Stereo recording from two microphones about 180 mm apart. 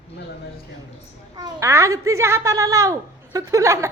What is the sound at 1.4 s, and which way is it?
A child's voice, 20° right (ahead or behind).